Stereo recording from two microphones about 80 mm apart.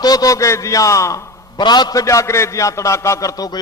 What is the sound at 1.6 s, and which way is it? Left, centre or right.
Speech, left.